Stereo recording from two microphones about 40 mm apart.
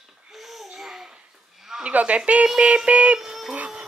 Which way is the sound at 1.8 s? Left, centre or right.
Right.